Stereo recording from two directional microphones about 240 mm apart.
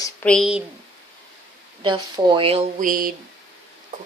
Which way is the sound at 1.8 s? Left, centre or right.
Centre.